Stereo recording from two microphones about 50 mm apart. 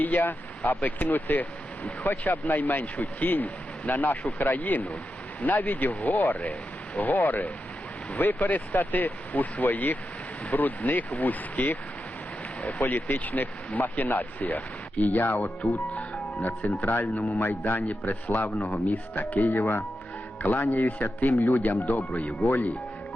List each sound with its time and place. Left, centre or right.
0.0 s speech: left
20.7 s speech: left